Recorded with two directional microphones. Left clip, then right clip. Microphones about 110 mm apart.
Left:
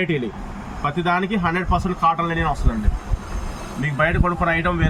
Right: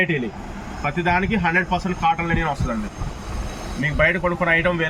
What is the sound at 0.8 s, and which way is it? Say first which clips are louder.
Speech: even; 20° left (ahead or behind).